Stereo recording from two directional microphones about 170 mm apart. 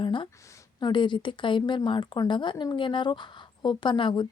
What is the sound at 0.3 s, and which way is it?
A woman's voice, 20° left (ahead or behind).